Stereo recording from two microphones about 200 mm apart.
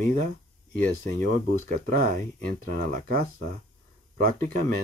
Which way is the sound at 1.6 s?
40° right (ahead or behind).